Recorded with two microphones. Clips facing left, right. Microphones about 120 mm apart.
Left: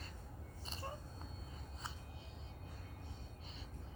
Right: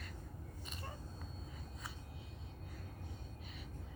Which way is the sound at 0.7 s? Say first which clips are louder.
Left 4 dB; 30° left (ahead or behind).